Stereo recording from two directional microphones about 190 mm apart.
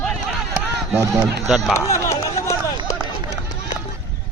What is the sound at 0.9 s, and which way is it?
Speech, 15° right (ahead or behind).